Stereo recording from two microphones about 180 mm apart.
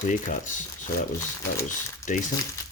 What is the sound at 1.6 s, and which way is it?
Speech, 45° left (ahead or behind).